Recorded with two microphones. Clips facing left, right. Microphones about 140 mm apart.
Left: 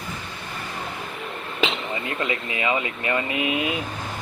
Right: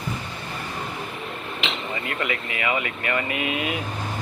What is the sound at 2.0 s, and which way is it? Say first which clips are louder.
Speech: left 1 dB; 25° left (ahead or behind).